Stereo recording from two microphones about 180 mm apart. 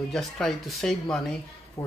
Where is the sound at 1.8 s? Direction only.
20° left (ahead or behind).